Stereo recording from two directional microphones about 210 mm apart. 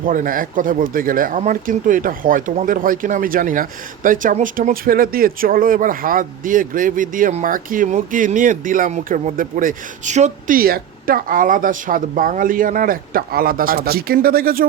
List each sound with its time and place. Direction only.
0.0 s speech: 40° right (ahead or behind)